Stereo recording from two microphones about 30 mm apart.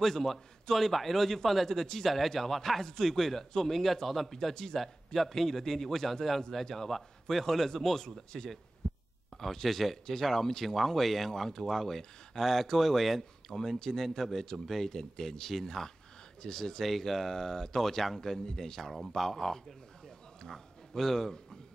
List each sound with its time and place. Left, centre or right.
0.0 s a man's voice: centre
8.8 s heart sounds: left
9.4 s a man's voice: centre
13.7 s a man's voice: centre
20.4 s a sound: centre